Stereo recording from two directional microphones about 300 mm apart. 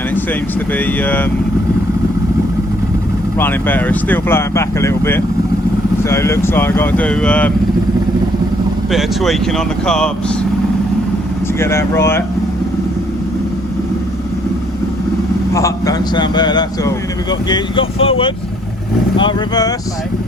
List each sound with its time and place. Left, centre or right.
0.7 s speech: centre
3.3 s speech: centre
8.9 s speech: centre
11.6 s speech: centre
15.5 s speech: centre